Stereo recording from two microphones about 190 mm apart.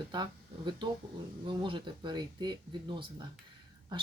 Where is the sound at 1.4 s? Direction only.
25° right (ahead or behind).